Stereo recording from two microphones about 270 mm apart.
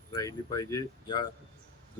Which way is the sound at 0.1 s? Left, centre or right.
Centre.